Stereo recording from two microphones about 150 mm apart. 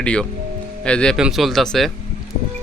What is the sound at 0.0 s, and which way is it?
A man's voice, 5° left (ahead or behind).